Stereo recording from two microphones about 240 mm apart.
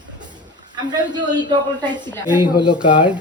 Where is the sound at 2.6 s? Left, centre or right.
Centre.